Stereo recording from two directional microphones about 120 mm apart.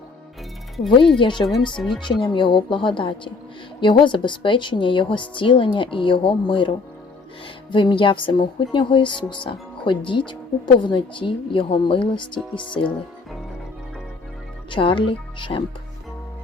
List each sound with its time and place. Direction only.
0.9 s a woman's voice: 45° left (ahead or behind)
1.5 s speech: 5° left (ahead or behind)
2.2 s a woman's voice: 40° left (ahead or behind)
7.7 s a woman's voice: 40° left (ahead or behind)
14.7 s a woman's voice: 45° left (ahead or behind)